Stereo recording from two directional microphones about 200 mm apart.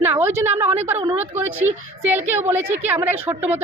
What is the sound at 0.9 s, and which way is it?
Speech, 30° right (ahead or behind).